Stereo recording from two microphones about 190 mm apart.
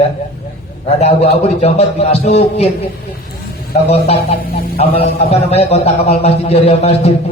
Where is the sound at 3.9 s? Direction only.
35° left (ahead or behind).